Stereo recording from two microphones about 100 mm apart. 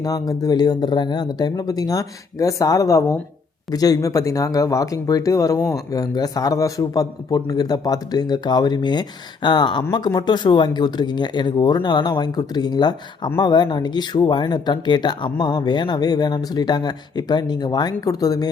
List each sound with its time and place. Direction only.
0.0 s speech: 40° left (ahead or behind)